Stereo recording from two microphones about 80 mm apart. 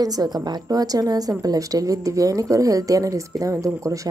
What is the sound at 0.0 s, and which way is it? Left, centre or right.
Speech, right.